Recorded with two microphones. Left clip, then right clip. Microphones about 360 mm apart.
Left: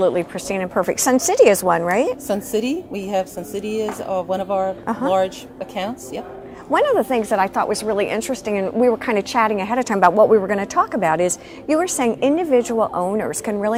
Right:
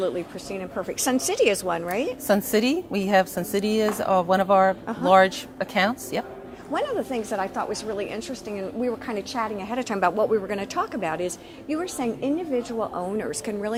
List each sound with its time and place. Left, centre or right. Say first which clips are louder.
0.0 s speech: left 9 dB; left
2.2 s a woman's voice: even; right
6.7 s speech: left 10 dB; left